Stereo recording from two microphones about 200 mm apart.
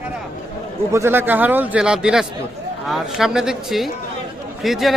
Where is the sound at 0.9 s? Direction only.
10° right (ahead or behind).